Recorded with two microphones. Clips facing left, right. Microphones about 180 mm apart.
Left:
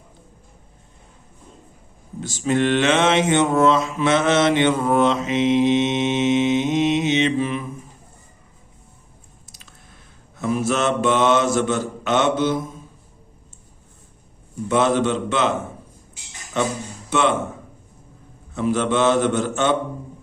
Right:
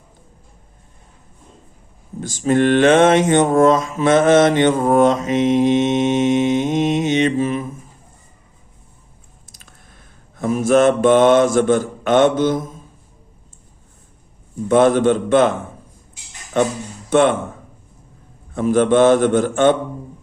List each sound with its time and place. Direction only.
2.2 s mantra: 50° right (ahead or behind)
9.5 s chewing: 50° right (ahead or behind)
10.3 s mantra: 45° right (ahead or behind)
14.7 s mantra: 50° right (ahead or behind)
16.6 s mantra: 50° right (ahead or behind)
17.1 s speech: 50° right (ahead or behind)
18.5 s mantra: 50° right (ahead or behind)